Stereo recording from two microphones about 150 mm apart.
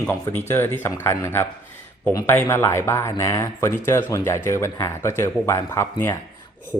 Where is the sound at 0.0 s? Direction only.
15° left (ahead or behind).